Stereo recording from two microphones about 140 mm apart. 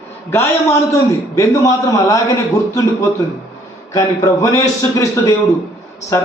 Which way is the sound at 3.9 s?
25° left (ahead or behind).